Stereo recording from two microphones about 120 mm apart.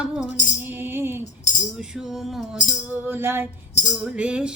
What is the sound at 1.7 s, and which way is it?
Music, 5° right (ahead or behind).